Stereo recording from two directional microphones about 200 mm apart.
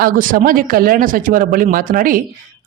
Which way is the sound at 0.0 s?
40° right (ahead or behind).